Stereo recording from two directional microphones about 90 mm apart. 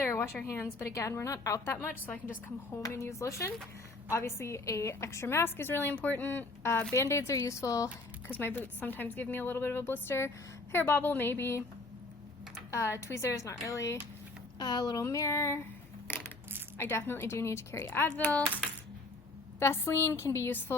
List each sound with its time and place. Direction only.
0.0 s a sound: 25° left (ahead or behind)
0.4 s a woman's voice: 30° left (ahead or behind)
2.8 s a woman's voice: 35° left (ahead or behind)
6.9 s a woman's voice: 35° left (ahead or behind)
8.3 s a woman's voice: 25° left (ahead or behind)
12.7 s a woman's voice: 30° left (ahead or behind)
14.6 s speech: 50° left (ahead or behind)
15.0 s a woman's voice: 35° left (ahead or behind)
16.1 s crushing: 25° left (ahead or behind)
16.7 s a woman's voice: 25° left (ahead or behind)
19.5 s a woman's voice: 25° left (ahead or behind)